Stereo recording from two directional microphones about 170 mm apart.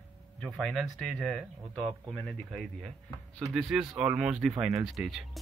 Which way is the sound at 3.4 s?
Centre (ahead or behind).